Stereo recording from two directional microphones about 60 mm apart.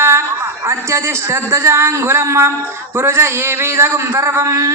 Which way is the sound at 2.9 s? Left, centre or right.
Right.